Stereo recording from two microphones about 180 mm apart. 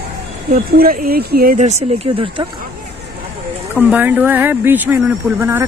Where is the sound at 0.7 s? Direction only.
55° right (ahead or behind).